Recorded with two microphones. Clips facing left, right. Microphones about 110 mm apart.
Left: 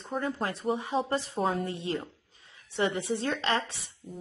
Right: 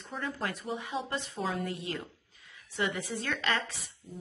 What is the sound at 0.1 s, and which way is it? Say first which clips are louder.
A woman's voice: left 4 dB; 35° left (ahead or behind).